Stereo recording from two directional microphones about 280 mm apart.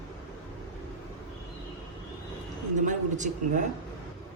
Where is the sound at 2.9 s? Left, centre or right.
Right.